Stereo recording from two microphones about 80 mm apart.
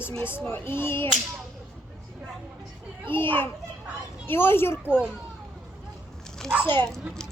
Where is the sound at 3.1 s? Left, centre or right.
Left.